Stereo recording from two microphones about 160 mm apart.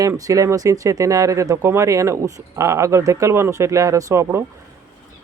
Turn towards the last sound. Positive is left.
turn(degrees=-15)  # may be behind; listen again after turning